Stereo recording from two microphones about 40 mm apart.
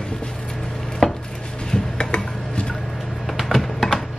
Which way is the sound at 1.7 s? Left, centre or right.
Centre.